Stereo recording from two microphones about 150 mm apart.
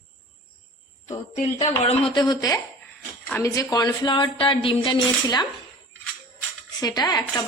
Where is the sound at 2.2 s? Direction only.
25° left (ahead or behind).